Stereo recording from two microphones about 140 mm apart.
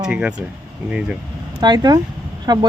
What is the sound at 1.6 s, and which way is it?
Speech, 30° right (ahead or behind).